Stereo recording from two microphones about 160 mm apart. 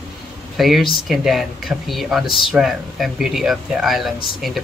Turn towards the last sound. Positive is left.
turn(degrees=0)  # may be behind; listen again after turning